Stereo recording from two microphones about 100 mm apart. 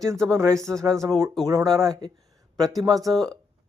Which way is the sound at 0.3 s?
30° right (ahead or behind).